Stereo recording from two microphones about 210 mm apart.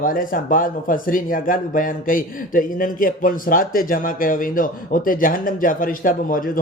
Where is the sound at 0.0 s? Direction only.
40° left (ahead or behind).